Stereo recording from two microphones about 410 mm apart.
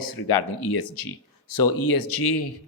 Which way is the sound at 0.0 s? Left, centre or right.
Left.